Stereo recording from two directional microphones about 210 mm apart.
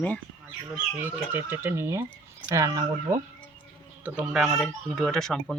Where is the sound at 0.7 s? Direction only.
10° right (ahead or behind).